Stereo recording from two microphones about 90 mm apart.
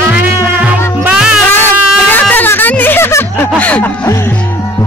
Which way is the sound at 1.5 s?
25° left (ahead or behind).